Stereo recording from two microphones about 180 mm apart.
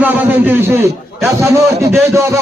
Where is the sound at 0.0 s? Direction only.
10° right (ahead or behind).